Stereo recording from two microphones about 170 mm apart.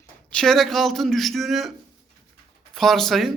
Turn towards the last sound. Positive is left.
turn(degrees=0)  # may be behind; listen again after turning